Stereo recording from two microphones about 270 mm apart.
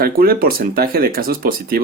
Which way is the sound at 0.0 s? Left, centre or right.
Right.